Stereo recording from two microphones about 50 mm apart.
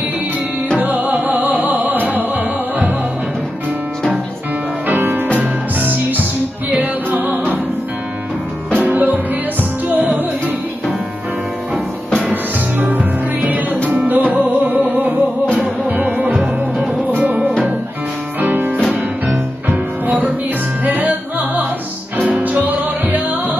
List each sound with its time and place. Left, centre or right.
0.7 s music: right
4.8 s music: right
8.8 s music: right
12.7 s music: right
16.3 s music: centre
18.4 s music: right